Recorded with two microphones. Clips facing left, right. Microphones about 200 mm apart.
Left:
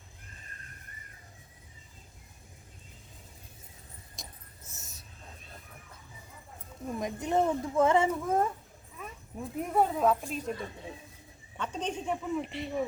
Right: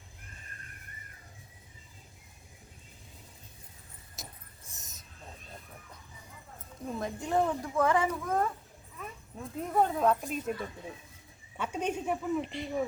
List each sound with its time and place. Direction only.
4.1 s keys jangling: 5° right (ahead or behind)
4.7 s a sound: 20° right (ahead or behind)
6.8 s speech: 15° left (ahead or behind)
9.0 s speech: 10° left (ahead or behind)
11.5 s speech: 10° right (ahead or behind)